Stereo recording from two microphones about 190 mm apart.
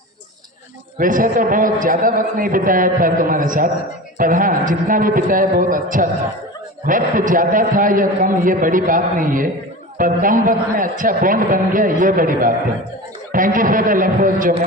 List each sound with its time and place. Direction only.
0.9 s a man's voice: 45° right (ahead or behind)